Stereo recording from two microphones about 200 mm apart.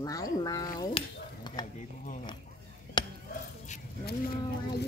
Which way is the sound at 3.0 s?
25° left (ahead or behind).